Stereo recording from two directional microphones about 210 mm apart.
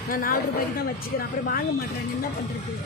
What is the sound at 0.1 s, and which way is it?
Speech, 45° left (ahead or behind).